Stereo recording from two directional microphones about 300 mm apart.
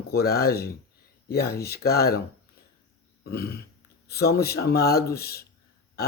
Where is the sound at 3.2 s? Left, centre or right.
Left.